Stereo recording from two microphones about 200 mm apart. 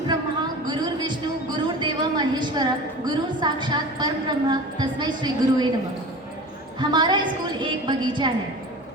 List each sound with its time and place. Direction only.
0.7 s a sound: 20° right (ahead or behind)
1.6 s a woman's voice: 20° right (ahead or behind)
6.7 s a woman's voice: 20° right (ahead or behind)